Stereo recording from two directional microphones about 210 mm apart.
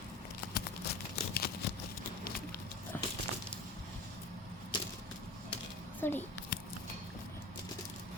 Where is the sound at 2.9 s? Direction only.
5° left (ahead or behind).